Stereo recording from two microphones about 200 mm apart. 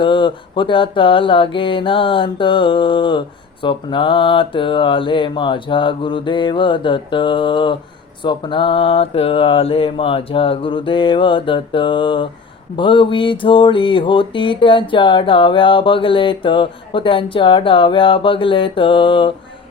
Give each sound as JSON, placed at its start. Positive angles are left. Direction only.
{"t": 0.0, "sound": "mantra", "side_deg": 25}